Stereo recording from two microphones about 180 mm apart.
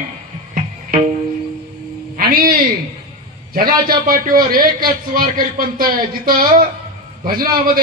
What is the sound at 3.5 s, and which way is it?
A man's voice, 55° right (ahead or behind).